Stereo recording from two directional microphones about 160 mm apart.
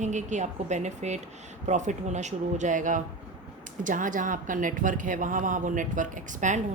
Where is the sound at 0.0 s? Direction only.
50° right (ahead or behind).